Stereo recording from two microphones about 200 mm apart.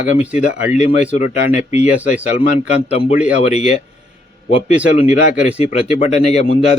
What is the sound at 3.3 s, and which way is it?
Speech, 35° left (ahead or behind).